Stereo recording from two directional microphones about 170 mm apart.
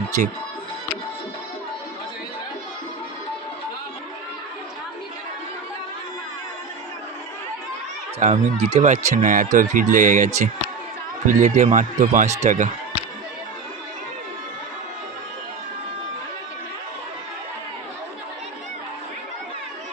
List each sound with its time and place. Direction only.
8.2 s speech: 35° right (ahead or behind)